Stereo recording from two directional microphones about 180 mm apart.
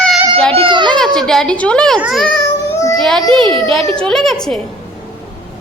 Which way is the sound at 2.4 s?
20° left (ahead or behind).